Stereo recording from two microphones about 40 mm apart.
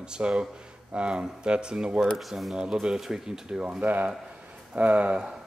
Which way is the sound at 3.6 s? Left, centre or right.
Right.